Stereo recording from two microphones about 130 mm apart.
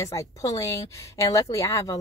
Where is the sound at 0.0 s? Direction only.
25° left (ahead or behind).